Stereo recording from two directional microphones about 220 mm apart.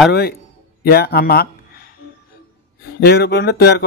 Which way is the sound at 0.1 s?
45° left (ahead or behind).